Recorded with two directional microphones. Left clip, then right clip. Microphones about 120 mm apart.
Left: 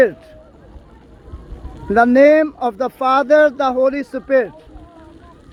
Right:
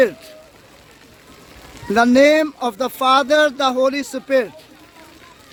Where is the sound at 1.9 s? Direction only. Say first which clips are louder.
Left 2 dB; 25° right (ahead or behind).